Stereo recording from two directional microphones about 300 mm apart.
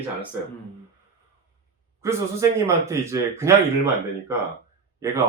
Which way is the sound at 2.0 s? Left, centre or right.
Centre.